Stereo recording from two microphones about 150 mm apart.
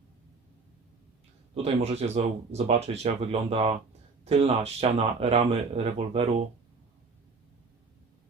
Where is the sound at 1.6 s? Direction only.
45° right (ahead or behind).